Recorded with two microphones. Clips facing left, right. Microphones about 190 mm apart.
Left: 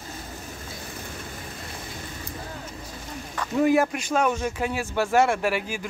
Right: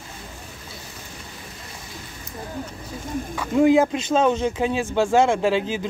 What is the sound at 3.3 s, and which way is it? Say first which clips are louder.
Speech: right 4 dB; 15° right (ahead or behind).